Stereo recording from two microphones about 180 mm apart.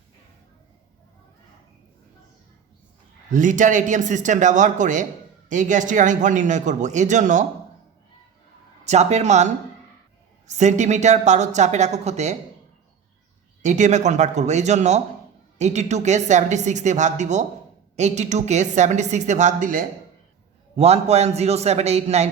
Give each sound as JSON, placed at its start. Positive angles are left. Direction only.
{"t": 3.3, "sound": "a man's voice", "side_deg": -45}
{"t": 8.8, "sound": "speech", "side_deg": -40}
{"t": 13.6, "sound": "speech", "side_deg": -40}
{"t": 20.7, "sound": "speech", "side_deg": -35}